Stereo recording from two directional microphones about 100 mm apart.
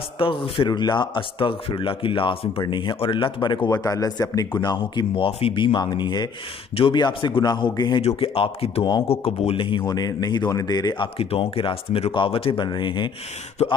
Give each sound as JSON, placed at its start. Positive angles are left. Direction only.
{"t": 0.2, "sound": "speech", "side_deg": 60}
{"t": 2.6, "sound": "speech", "side_deg": 50}
{"t": 3.7, "sound": "a man's voice", "side_deg": 35}
{"t": 4.5, "sound": "speech", "side_deg": 50}
{"t": 8.2, "sound": "a man's voice", "side_deg": 65}
{"t": 9.8, "sound": "a man's voice", "side_deg": 40}
{"t": 11.1, "sound": "speech", "side_deg": 70}